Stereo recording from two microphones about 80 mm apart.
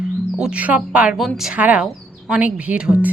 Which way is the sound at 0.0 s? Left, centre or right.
Centre.